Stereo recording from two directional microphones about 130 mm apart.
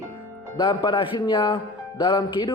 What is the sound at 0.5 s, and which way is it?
A man's voice, 30° left (ahead or behind).